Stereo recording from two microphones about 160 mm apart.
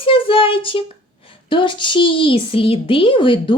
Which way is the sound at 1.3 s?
30° left (ahead or behind).